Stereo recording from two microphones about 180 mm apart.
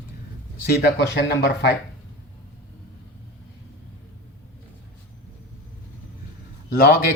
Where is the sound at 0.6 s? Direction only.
70° left (ahead or behind).